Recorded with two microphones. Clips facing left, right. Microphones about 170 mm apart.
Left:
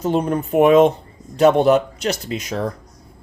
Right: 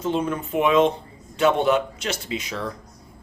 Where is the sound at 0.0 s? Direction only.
40° left (ahead or behind).